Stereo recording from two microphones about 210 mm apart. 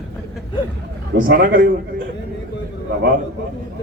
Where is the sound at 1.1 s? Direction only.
60° right (ahead or behind).